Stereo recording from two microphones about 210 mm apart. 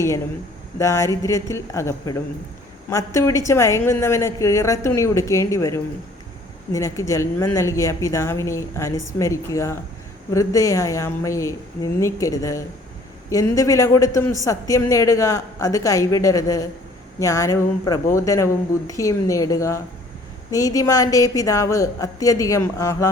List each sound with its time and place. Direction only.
0.8 s a man's voice: 15° left (ahead or behind)